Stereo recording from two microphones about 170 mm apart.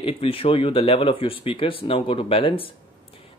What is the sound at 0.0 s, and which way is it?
Speech, 35° left (ahead or behind).